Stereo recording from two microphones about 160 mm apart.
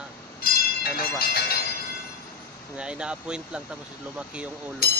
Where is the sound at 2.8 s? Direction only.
5° right (ahead or behind).